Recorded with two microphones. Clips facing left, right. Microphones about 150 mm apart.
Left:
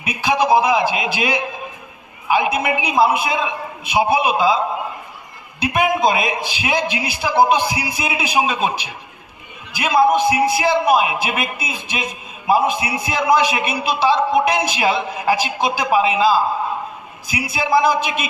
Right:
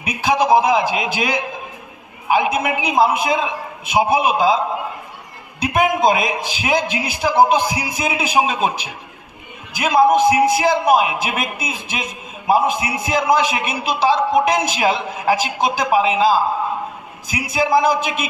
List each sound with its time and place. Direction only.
0.0 s a man's voice: 45° right (ahead or behind)
2.3 s a man's voice: 45° right (ahead or behind)
5.6 s a man's voice: 45° right (ahead or behind)
17.5 s a man's voice: 45° right (ahead or behind)